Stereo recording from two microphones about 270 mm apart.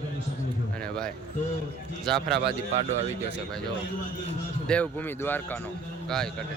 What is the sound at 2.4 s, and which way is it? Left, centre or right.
Speech, right.